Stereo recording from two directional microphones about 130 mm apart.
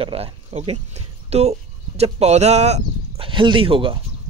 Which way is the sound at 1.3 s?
55° right (ahead or behind).